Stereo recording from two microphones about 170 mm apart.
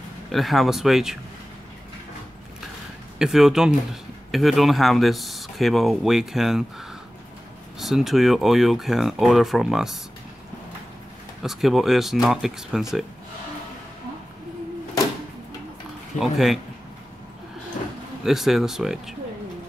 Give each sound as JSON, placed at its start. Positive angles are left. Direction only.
{"t": 0.3, "sound": "speech", "side_deg": 0}
{"t": 3.2, "sound": "speech", "side_deg": 0}
{"t": 7.8, "sound": "speech", "side_deg": 0}
{"t": 11.4, "sound": "speech", "side_deg": 0}
{"t": 16.2, "sound": "speech", "side_deg": 0}
{"t": 18.2, "sound": "speech", "side_deg": 0}